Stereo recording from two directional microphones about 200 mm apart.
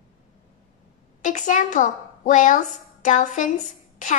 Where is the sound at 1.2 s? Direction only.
40° left (ahead or behind).